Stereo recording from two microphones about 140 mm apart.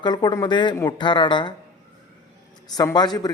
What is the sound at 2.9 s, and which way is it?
Speech, 30° left (ahead or behind).